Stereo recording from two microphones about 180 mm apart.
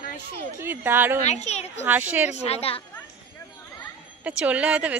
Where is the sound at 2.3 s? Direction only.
35° left (ahead or behind).